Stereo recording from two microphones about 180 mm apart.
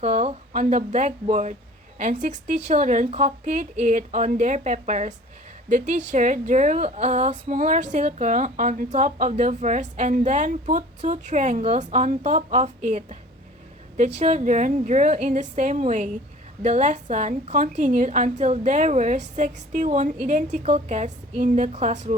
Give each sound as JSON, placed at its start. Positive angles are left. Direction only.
{"t": 0.0, "sound": "a woman's voice", "side_deg": -35}